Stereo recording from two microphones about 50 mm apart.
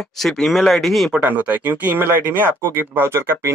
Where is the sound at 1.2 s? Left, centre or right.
Right.